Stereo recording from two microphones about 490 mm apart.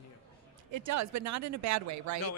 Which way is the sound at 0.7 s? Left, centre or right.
Right.